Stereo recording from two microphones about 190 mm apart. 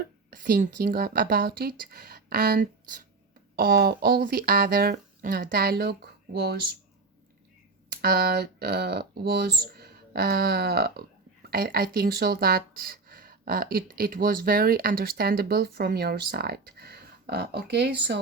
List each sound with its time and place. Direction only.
0.3 s speech: 45° right (ahead or behind)
8.0 s speech: 55° right (ahead or behind)